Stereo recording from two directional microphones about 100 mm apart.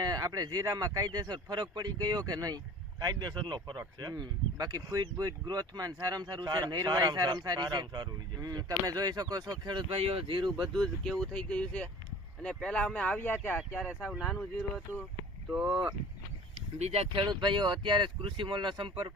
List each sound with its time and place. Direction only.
0.0 s speech: 40° right (ahead or behind)
9.9 s speech: 75° right (ahead or behind); by 10.7 s 50° right (ahead or behind)
10.8 s speech: 5° left (ahead or behind)
13.8 s speech: 5° right (ahead or behind)
15.4 s speech: 5° right (ahead or behind)
16.7 s speech: 90° right
17.2 s speech: 50° right (ahead or behind)